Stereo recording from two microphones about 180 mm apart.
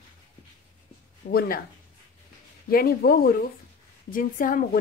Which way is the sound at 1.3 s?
55° left (ahead or behind).